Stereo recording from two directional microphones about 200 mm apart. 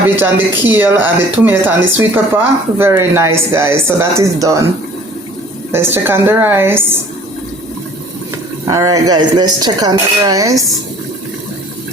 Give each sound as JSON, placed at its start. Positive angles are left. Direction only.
{"t": 0.2, "sound": "speech", "side_deg": -10}
{"t": 5.7, "sound": "speech", "side_deg": -10}
{"t": 8.6, "sound": "cutlery", "side_deg": -15}